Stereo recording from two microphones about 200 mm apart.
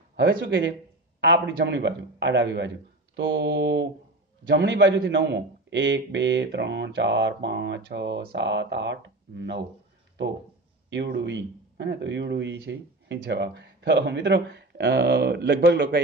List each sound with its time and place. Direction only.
0.1 s speech: 65° right (ahead or behind)
10.9 s speech: 60° right (ahead or behind)